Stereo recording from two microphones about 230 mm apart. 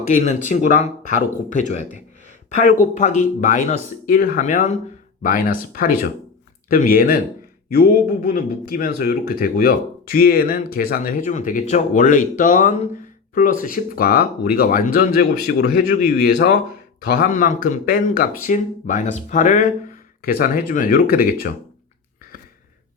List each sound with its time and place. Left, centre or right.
0.0 s speech: left